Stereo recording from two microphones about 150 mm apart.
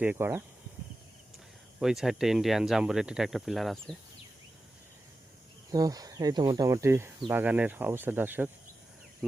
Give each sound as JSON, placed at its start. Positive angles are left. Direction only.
{"t": 0.0, "sound": "speech", "side_deg": -10}
{"t": 1.8, "sound": "speech", "side_deg": -5}
{"t": 5.7, "sound": "speech", "side_deg": -25}